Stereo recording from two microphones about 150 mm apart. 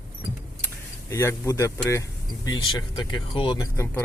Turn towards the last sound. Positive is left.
turn(degrees=20)  # may be behind; listen again after turning